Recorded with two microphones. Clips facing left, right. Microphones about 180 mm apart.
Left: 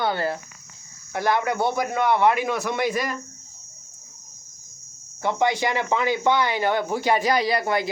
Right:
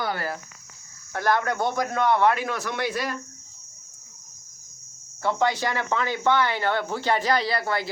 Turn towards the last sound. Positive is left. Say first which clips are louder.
# left 4 dB
turn(degrees=15)  # may be behind; listen again after turning